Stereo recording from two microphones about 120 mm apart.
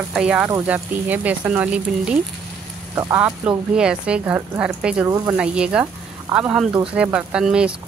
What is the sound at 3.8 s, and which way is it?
Speech, 10° right (ahead or behind).